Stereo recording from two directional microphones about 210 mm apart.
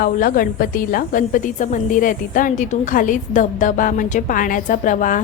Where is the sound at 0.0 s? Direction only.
40° left (ahead or behind).